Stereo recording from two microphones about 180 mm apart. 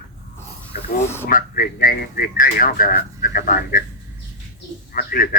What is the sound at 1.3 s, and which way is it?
Speech, 50° left (ahead or behind).